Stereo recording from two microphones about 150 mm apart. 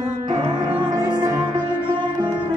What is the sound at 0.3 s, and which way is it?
Music, 25° right (ahead or behind).